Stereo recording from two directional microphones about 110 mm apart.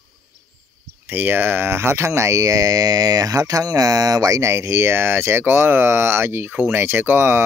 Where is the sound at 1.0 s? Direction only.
20° right (ahead or behind).